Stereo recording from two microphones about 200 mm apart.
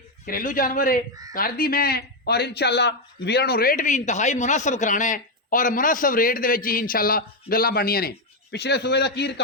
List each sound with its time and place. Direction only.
0.3 s a man's voice: 45° left (ahead or behind)